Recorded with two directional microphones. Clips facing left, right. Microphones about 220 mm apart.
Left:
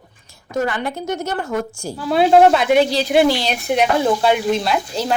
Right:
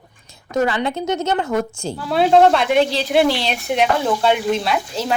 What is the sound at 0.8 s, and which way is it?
Speech, 20° right (ahead or behind).